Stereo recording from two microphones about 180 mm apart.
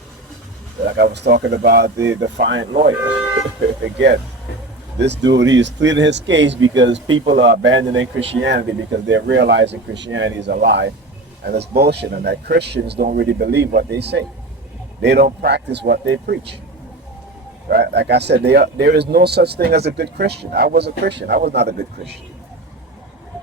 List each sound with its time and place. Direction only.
0.9 s speech: 65° right (ahead or behind)
2.0 s speech: 90° right
3.8 s speech: 75° right (ahead or behind)
7.3 s speech: 70° right (ahead or behind); by 10.3 s 90° right
10.4 s speech: 65° right (ahead or behind)
17.7 s speech: 65° right (ahead or behind)